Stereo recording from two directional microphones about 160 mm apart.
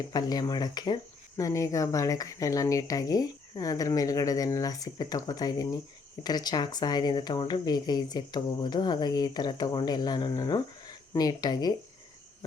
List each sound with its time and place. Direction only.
0.0 s speech: 25° left (ahead or behind)